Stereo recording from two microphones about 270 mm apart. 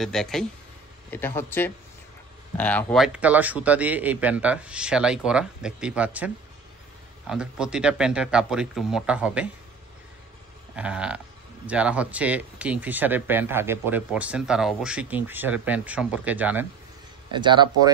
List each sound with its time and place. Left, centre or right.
0.0 s speech: centre
10.8 s speech: centre
17.3 s speech: centre